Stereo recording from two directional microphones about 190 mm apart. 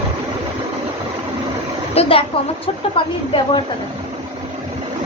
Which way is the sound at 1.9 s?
30° left (ahead or behind).